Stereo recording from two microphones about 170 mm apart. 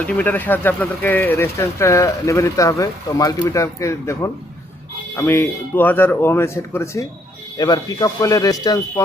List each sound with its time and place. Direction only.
0.0 s speech: 10° left (ahead or behind)